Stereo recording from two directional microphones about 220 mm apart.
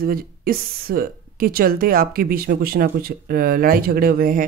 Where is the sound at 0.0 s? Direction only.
40° right (ahead or behind).